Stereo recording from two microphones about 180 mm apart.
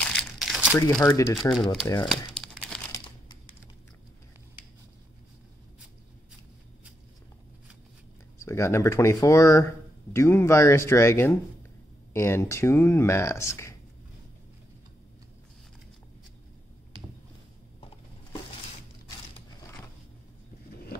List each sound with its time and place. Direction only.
0.0 s crumpling: 5° left (ahead or behind)
1.0 s speech: 20° left (ahead or behind)
2.0 s crumpling: centre (ahead or behind)
8.4 s speech: 15° left (ahead or behind)
17.7 s a sound: 30° left (ahead or behind)